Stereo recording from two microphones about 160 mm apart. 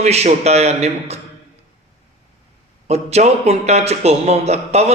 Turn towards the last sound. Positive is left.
turn(degrees=-40)  # may be behind; listen again after turning